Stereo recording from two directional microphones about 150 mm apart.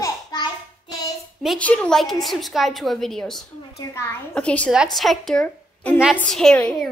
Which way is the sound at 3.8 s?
20° left (ahead or behind).